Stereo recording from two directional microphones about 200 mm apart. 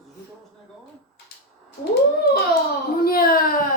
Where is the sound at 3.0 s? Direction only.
50° left (ahead or behind).